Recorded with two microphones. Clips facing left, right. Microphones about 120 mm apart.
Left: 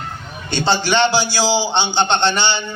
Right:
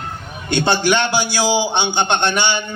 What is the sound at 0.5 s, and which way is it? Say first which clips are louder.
A man's voice: right 1 dB; 55° right (ahead or behind).